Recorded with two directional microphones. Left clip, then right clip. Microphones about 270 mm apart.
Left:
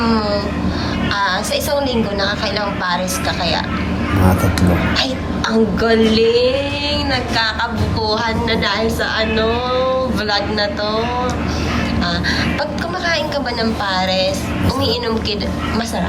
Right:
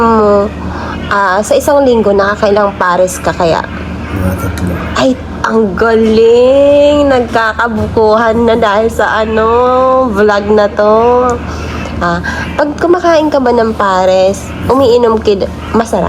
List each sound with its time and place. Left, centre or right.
0.0 s a sound: centre
1.1 s a woman's voice: centre
4.9 s a woman's voice: centre